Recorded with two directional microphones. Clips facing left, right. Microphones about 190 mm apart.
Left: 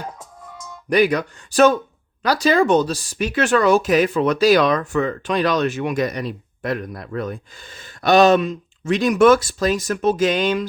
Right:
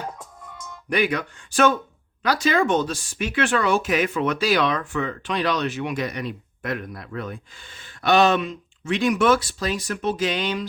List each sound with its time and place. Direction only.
0.9 s speech: 40° left (ahead or behind)